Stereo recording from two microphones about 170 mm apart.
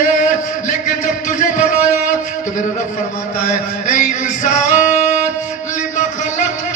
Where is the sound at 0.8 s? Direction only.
45° left (ahead or behind).